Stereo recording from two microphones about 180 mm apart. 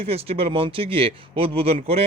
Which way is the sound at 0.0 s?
35° right (ahead or behind).